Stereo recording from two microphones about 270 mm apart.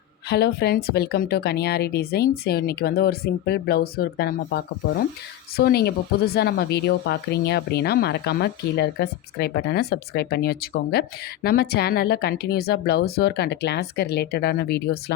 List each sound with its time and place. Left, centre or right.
0.3 s speech: left